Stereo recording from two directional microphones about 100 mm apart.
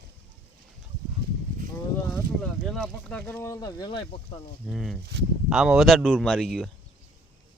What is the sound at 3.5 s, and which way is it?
Speech, 35° left (ahead or behind).